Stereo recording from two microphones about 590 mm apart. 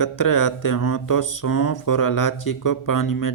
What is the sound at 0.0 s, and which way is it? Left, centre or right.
Speech, left.